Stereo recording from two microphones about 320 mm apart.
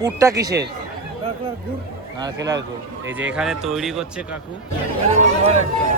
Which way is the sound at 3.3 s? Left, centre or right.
Centre.